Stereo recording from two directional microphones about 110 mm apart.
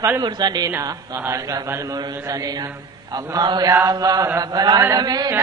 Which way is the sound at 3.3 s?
40° right (ahead or behind).